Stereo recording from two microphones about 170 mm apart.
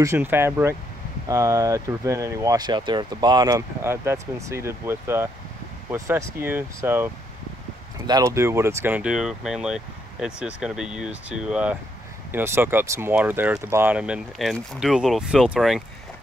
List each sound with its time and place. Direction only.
0.0 s speech: 15° right (ahead or behind)
8.1 s speech: 20° right (ahead or behind); by 15.8 s centre (ahead or behind)